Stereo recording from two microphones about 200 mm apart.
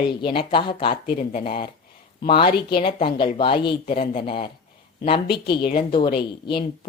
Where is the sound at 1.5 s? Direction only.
25° left (ahead or behind).